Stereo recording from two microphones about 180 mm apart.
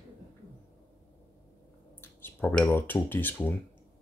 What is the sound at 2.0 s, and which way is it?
Speech, 10° left (ahead or behind).